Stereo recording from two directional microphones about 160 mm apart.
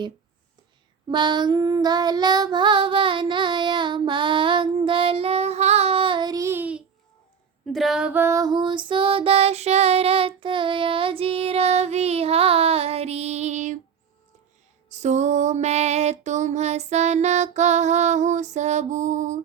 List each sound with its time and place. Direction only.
1.0 s child singing: 30° right (ahead or behind); by 6.8 s 10° right (ahead or behind)
7.6 s female singing: centre (ahead or behind); by 13.7 s 45° right (ahead or behind)
14.8 s music: 45° right (ahead or behind)